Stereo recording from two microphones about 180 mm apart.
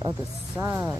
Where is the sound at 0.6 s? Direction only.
10° right (ahead or behind).